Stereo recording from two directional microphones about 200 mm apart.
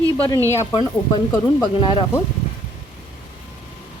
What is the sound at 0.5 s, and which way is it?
Speech, 20° left (ahead or behind).